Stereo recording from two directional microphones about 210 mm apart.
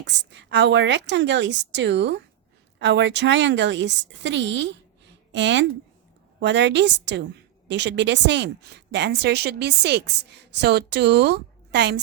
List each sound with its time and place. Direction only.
0.0 s a woman's voice: 55° right (ahead or behind)